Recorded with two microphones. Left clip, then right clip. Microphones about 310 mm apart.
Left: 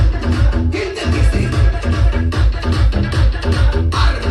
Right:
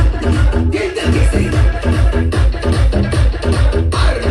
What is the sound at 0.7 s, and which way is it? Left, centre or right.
Music, left.